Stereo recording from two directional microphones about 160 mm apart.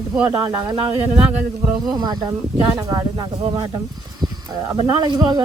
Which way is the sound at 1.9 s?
25° right (ahead or behind).